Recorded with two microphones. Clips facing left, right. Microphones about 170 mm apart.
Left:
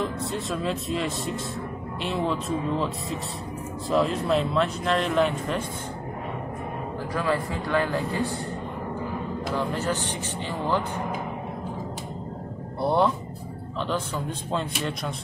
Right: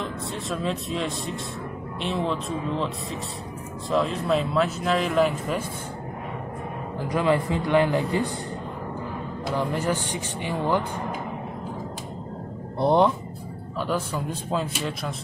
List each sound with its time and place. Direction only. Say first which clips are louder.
0.0 s speech: left 3 dB; centre (ahead or behind)
3.9 s speech: even; centre (ahead or behind)
7.1 s speech: right 5 dB; 20° right (ahead or behind)
9.6 s speech: right 3 dB; 15° right (ahead or behind)
12.8 s speech: right 3 dB; 20° right (ahead or behind)
13.7 s speech: right 1 dB; 10° right (ahead or behind)